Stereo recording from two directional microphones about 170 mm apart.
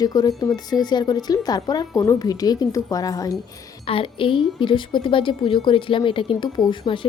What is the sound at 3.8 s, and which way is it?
A woman's voice, 30° left (ahead or behind).